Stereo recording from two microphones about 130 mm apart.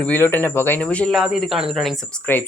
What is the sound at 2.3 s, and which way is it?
Speech, 15° left (ahead or behind).